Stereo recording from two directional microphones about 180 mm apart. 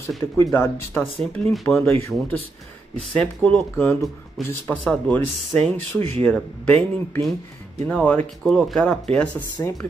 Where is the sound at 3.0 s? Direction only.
5° left (ahead or behind).